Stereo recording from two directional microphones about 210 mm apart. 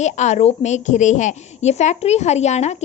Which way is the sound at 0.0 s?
35° left (ahead or behind).